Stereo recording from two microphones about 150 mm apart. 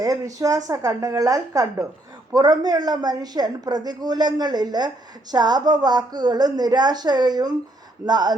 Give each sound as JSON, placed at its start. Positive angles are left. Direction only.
{"t": 0.3, "sound": "a woman's voice", "side_deg": -25}